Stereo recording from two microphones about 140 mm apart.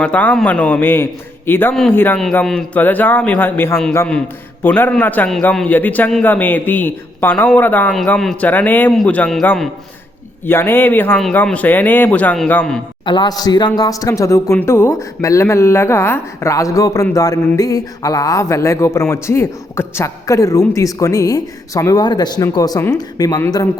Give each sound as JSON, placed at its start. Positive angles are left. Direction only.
{"t": 0.0, "sound": "a man's voice", "side_deg": 10}
{"t": 13.1, "sound": "a man's voice", "side_deg": 30}